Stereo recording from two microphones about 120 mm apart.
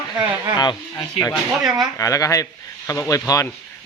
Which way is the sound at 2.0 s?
25° left (ahead or behind).